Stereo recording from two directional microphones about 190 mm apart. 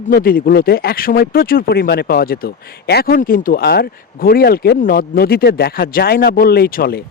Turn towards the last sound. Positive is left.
turn(degrees=50)  # may be behind; listen again after turning